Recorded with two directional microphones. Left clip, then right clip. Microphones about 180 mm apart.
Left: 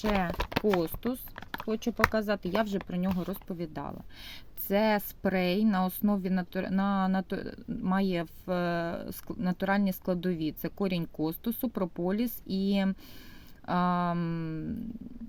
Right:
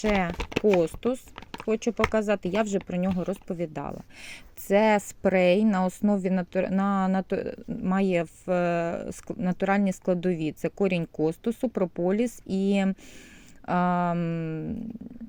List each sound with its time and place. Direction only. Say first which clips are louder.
0.3 s speech: right 5 dB; 5° left (ahead or behind)
0.8 s speech: right 7 dB; 15° right (ahead or behind)